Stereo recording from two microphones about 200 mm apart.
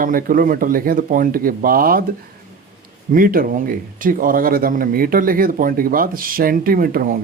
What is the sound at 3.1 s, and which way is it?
Speech, 45° right (ahead or behind).